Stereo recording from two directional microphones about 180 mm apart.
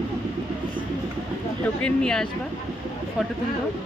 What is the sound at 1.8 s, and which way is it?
Speech, 5° left (ahead or behind).